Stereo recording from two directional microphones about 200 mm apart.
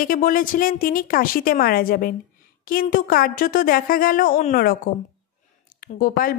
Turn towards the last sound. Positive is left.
turn(degrees=45)  # may be behind; listen again after turning